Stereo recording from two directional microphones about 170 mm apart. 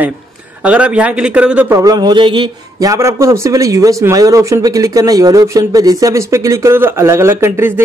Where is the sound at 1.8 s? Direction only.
25° right (ahead or behind).